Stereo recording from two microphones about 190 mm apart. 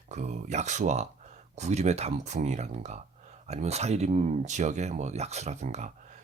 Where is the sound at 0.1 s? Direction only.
40° right (ahead or behind).